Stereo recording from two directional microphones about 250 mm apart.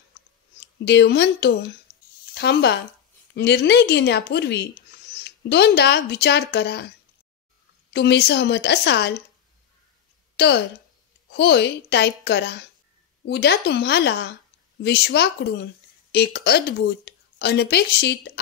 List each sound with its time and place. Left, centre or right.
0.6 s speech: left
7.9 s speech: left
10.3 s a woman's voice: left